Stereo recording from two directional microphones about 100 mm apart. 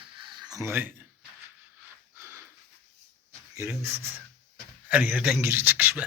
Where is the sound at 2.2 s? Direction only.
25° right (ahead or behind).